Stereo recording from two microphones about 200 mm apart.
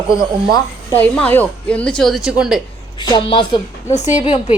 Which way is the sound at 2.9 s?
20° left (ahead or behind).